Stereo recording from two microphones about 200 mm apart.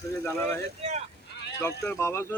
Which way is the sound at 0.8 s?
35° right (ahead or behind).